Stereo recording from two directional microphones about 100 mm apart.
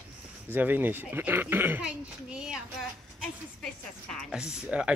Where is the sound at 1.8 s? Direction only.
10° right (ahead or behind).